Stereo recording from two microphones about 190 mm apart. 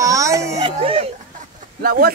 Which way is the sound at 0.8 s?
30° right (ahead or behind).